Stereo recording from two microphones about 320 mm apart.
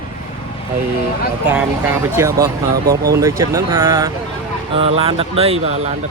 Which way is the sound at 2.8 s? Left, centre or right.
Right.